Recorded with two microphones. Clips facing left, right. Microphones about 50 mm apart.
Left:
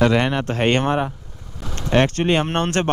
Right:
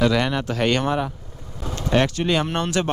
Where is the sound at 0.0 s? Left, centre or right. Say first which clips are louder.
Left 2 dB; left.